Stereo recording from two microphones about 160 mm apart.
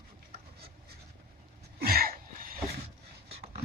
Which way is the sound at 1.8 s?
70° right (ahead or behind).